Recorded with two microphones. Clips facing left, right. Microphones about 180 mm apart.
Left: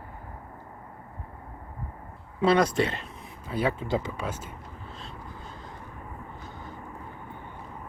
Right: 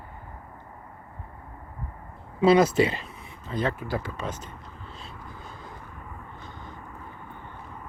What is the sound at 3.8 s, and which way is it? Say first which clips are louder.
Speech: left 2 dB; 20° left (ahead or behind).